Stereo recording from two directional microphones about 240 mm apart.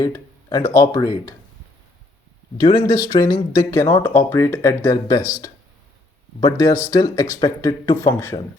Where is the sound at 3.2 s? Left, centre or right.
Centre.